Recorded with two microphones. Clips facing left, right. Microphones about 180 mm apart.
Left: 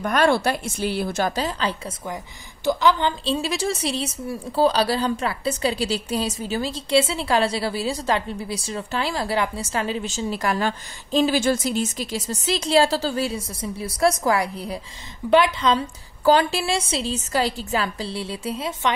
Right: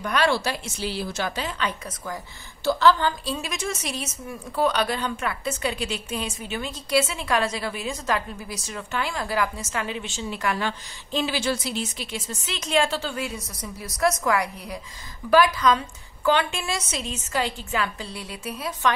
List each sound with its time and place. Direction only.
0.0 s a woman's voice: 50° left (ahead or behind)
2.6 s a woman's voice: 15° left (ahead or behind)
16.3 s a woman's voice: 35° left (ahead or behind)